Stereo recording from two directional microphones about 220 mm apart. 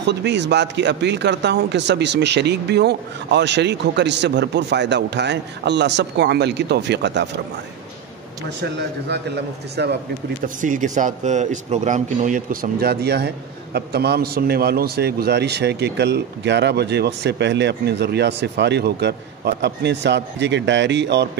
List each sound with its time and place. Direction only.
0.0 s a man's voice: 50° right (ahead or behind)
8.5 s a man's voice: 50° right (ahead or behind)
10.6 s a man's voice: 35° right (ahead or behind); by 21.3 s 50° right (ahead or behind)